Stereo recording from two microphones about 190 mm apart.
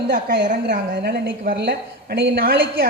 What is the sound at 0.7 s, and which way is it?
A woman's voice, 65° right (ahead or behind).